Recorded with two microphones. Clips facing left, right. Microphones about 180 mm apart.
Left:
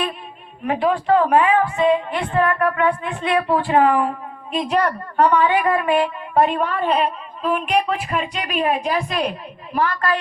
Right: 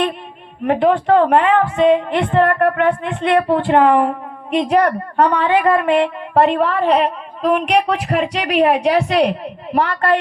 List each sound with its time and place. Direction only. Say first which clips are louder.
0.9 s a woman's voice: right 3 dB; 65° right (ahead or behind)
4.7 s a woman's voice: right 4 dB; 55° right (ahead or behind)